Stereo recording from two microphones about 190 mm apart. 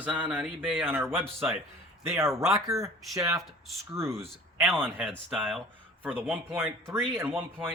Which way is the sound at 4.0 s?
15° right (ahead or behind).